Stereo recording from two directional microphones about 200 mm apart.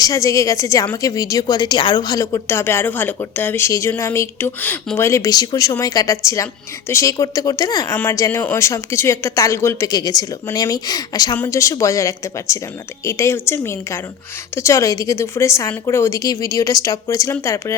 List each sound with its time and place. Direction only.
0.0 s a woman's voice: 15° left (ahead or behind)